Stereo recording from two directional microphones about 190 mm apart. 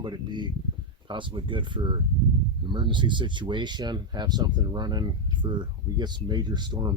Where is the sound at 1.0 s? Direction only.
25° right (ahead or behind).